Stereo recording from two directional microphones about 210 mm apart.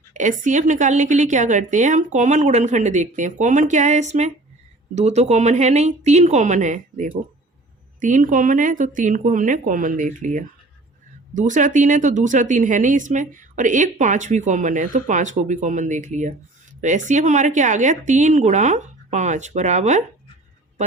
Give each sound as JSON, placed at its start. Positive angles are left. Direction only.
{"t": 0.1, "sound": "a woman's voice", "side_deg": -35}